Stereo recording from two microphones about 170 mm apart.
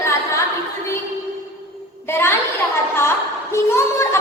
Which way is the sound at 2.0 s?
15° left (ahead or behind).